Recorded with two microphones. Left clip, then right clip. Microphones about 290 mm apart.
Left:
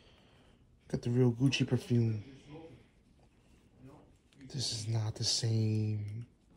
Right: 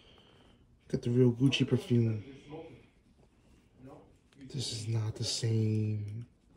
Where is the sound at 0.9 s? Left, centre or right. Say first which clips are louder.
Right 3 dB; centre.